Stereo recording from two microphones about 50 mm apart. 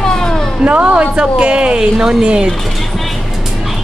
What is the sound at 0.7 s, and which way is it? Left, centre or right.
Speech, right.